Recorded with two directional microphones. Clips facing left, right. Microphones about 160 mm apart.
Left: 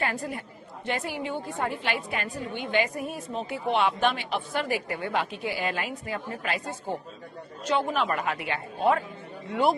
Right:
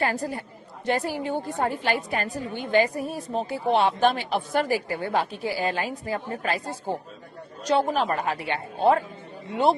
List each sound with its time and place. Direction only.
0.0 s a woman's voice: 35° right (ahead or behind)